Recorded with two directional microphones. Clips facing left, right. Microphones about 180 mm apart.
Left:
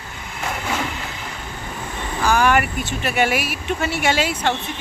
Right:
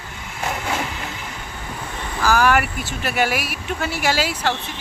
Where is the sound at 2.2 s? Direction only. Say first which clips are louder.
Even; centre (ahead or behind).